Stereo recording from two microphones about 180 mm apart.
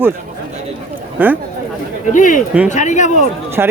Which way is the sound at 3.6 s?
10° right (ahead or behind).